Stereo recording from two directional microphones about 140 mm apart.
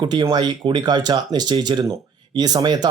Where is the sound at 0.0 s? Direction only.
30° right (ahead or behind).